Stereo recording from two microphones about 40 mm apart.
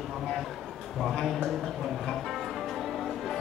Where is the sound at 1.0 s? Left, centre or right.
Centre.